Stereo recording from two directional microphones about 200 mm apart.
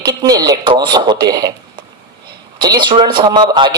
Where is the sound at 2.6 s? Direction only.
20° right (ahead or behind).